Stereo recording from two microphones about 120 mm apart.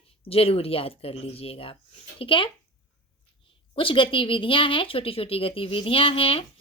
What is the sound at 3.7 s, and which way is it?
Speech, 50° left (ahead or behind).